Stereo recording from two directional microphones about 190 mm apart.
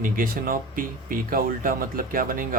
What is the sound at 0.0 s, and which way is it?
Speech, 45° right (ahead or behind).